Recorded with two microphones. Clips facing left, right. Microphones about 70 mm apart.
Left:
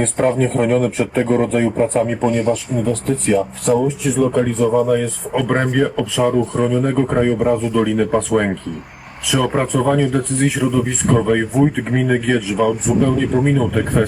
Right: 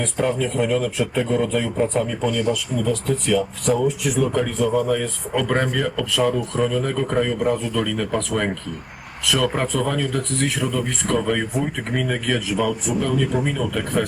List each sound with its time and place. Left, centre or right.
0.0 s a man's voice: left
7.3 s speech: centre
13.1 s a man's voice: left